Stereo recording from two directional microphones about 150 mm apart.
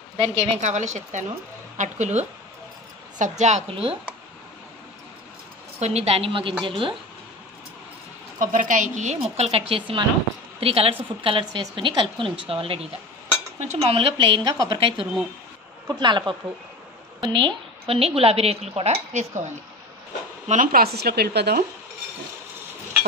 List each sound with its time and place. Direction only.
0.2 s a woman's voice: 40° right (ahead or behind)
5.8 s a woman's voice: 45° right (ahead or behind)
8.4 s a woman's voice: 60° right (ahead or behind); by 18.9 s 40° right (ahead or behind)
19.1 s a woman's voice: 55° right (ahead or behind)
20.4 s speech: 65° right (ahead or behind); by 21.6 s 90° right